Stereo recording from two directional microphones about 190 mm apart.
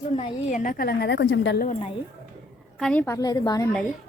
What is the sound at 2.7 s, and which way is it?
Speech, centre (ahead or behind).